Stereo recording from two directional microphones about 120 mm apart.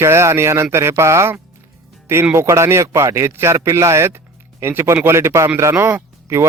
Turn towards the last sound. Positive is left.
turn(degrees=-20)  # may be behind; listen again after turning